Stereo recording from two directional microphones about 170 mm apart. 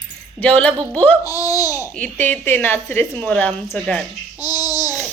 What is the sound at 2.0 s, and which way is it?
A woman's voice, 10° left (ahead or behind).